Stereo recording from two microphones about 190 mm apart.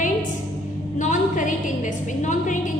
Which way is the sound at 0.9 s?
40° left (ahead or behind).